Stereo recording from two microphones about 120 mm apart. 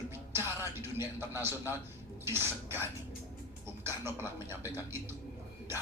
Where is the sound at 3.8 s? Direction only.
20° right (ahead or behind).